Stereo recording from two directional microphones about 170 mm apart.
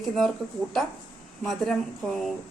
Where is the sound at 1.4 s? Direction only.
Centre (ahead or behind).